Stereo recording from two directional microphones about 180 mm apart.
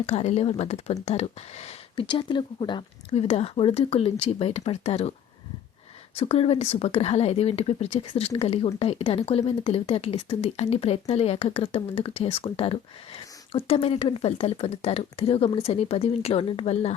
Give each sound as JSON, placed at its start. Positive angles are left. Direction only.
{"t": 0.0, "sound": "speech", "side_deg": 35}
{"t": 6.1, "sound": "speech", "side_deg": 35}